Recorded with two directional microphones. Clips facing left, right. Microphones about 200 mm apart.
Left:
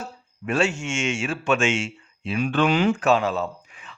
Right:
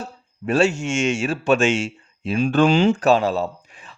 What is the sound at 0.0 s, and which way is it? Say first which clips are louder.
Speech: right 4 dB; 35° right (ahead or behind).